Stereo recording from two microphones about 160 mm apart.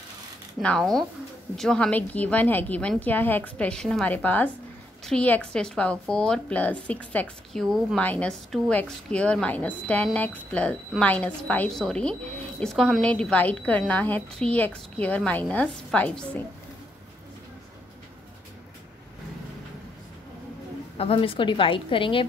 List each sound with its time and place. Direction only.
0.6 s speech: 5° left (ahead or behind)
21.0 s a woman's voice: 35° left (ahead or behind)